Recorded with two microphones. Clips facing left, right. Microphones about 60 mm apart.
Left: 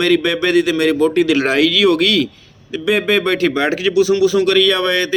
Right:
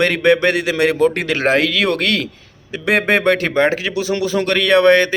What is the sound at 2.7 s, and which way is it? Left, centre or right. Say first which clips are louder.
Speech: even; right.